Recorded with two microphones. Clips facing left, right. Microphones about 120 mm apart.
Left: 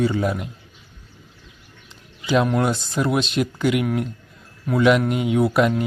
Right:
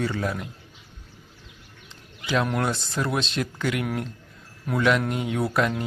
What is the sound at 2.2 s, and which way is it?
Speech, 10° left (ahead or behind).